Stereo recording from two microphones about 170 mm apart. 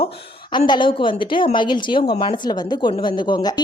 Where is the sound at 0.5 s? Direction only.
25° left (ahead or behind).